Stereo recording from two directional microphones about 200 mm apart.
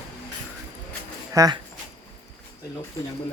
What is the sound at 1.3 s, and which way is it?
Speech, 15° right (ahead or behind).